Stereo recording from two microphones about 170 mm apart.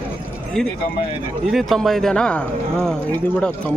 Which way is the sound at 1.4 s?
Centre (ahead or behind).